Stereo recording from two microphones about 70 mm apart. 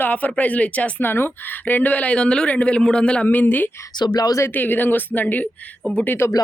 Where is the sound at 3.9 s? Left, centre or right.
Left.